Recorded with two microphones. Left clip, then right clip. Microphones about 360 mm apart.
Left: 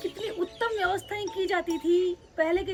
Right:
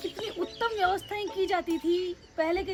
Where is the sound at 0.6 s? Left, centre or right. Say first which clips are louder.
Right 1 dB; right.